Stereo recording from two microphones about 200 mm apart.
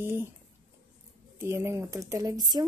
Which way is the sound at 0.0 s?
10° right (ahead or behind).